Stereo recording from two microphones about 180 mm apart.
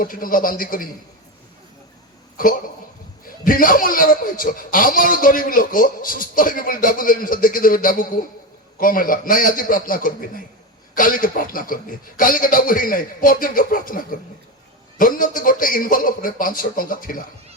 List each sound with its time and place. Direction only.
0.0 s a man's voice: 50° left (ahead or behind)
2.4 s a man's voice: 50° left (ahead or behind)